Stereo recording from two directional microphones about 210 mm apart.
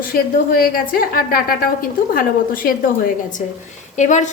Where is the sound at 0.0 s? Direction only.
45° left (ahead or behind).